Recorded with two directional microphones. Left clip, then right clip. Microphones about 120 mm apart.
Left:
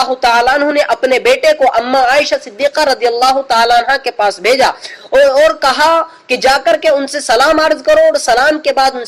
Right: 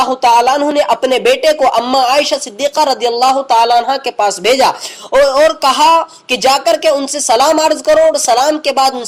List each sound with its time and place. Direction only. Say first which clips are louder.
0.1 s speech: right 1 dB; 40° right (ahead or behind)
5.1 s speech: left 1 dB; 50° right (ahead or behind)